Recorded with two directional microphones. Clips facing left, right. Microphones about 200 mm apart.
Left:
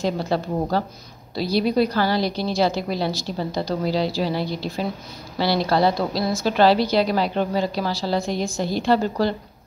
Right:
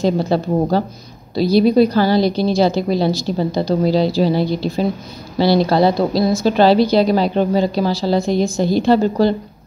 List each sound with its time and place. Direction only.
0.0 s a woman's voice: 30° right (ahead or behind)